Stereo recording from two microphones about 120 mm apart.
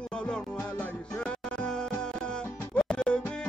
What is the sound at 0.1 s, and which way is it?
Music, 5° left (ahead or behind).